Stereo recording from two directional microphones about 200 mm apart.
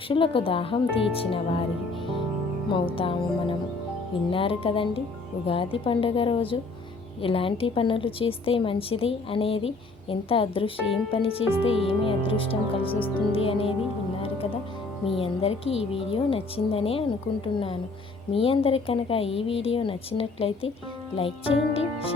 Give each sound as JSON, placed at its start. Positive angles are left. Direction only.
{"t": 0.1, "sound": "a woman's voice", "side_deg": 25}
{"t": 2.6, "sound": "a woman's voice", "side_deg": 25}
{"t": 10.8, "sound": "speech", "side_deg": 0}
{"t": 11.1, "sound": "a woman's voice", "side_deg": 30}
{"t": 15.0, "sound": "a woman's voice", "side_deg": 30}